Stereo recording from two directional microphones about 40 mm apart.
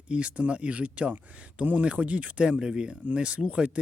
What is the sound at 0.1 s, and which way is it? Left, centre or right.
Speech, right.